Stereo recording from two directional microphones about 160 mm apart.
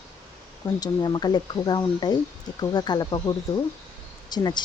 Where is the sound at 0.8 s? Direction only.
25° left (ahead or behind).